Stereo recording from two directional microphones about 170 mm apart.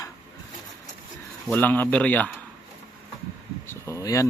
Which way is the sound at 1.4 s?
10° left (ahead or behind).